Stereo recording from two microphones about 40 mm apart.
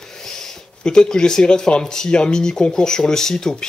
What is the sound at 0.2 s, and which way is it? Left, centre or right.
Speech, centre.